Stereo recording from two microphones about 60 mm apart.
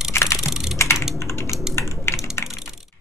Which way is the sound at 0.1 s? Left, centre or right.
Left.